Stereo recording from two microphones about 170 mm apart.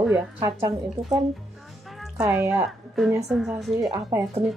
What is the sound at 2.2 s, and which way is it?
Speech, 15° right (ahead or behind).